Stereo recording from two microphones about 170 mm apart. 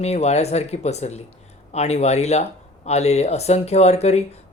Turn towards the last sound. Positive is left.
turn(degrees=40)  # may be behind; listen again after turning